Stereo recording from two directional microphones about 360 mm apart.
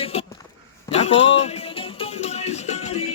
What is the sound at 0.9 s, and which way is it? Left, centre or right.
Music, centre.